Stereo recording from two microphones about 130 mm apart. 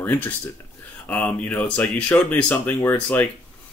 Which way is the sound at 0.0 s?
15° left (ahead or behind).